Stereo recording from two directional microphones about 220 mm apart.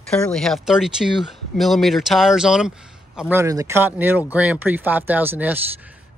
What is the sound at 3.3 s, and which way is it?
Speech, 15° right (ahead or behind).